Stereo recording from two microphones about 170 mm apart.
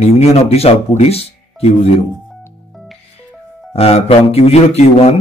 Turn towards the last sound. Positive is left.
turn(degrees=40)  # may be behind; listen again after turning